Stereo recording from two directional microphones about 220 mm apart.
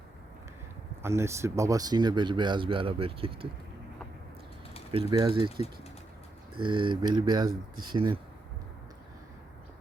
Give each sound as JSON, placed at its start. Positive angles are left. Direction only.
{"t": 1.0, "sound": "speech", "side_deg": -10}
{"t": 5.2, "sound": "speech", "side_deg": -20}